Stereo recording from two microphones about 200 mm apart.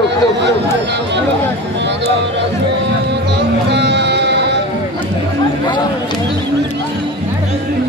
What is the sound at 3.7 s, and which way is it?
Music, 60° right (ahead or behind).